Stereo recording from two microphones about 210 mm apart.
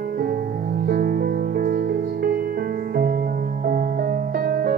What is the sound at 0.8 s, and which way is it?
Music, 45° right (ahead or behind).